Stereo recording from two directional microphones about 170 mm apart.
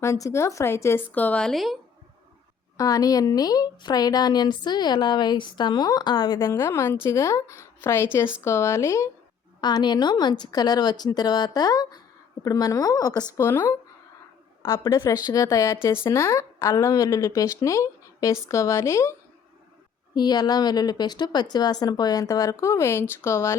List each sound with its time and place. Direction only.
0.0 s speech: 15° left (ahead or behind); by 1.8 s centre (ahead or behind)
2.7 s speech: 20° left (ahead or behind)
20.1 s speech: 25° left (ahead or behind)